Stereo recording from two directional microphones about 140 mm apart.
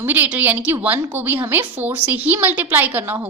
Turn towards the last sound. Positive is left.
turn(degrees=-15)  # may be behind; listen again after turning